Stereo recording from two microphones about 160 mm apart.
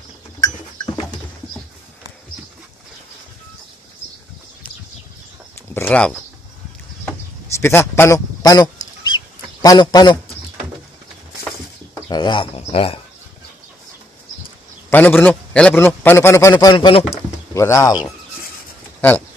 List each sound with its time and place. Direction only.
5.8 s speech: 10° left (ahead or behind)
7.1 s a sound: 15° left (ahead or behind)
11.9 s speech: 25° left (ahead or behind)
14.9 s a man's voice: 10° left (ahead or behind)
16.7 s speech: 30° left (ahead or behind)
17.6 s speech: 20° left (ahead or behind)
18.9 s speech: 10° left (ahead or behind)